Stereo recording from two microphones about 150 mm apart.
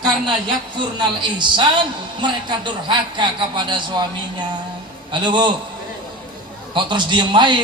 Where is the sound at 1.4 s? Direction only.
30° right (ahead or behind).